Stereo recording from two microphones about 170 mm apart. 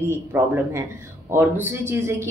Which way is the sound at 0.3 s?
15° right (ahead or behind).